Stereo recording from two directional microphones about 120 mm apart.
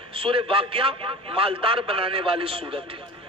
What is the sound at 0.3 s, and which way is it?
A man's voice, 45° right (ahead or behind).